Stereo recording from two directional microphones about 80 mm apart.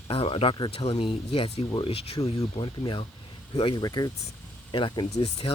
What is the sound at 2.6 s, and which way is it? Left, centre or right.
Speech, left.